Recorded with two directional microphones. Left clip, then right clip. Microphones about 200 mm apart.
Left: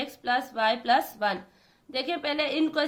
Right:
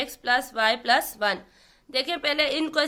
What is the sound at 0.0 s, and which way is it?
A woman's voice, 25° right (ahead or behind).